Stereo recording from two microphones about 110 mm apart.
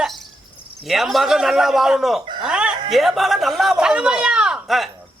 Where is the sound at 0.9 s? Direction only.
Centre (ahead or behind).